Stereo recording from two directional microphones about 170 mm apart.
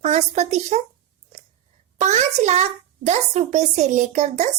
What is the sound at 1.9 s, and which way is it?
A child's voice, 40° right (ahead or behind).